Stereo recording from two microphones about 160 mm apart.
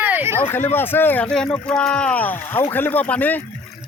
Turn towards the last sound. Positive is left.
turn(degrees=10)  # may be behind; listen again after turning